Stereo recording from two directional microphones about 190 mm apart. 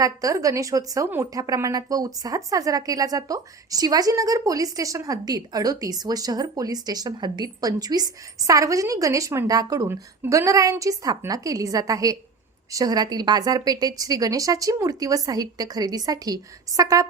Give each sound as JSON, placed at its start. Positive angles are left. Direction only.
{"t": 0.0, "sound": "a woman's voice", "side_deg": -20}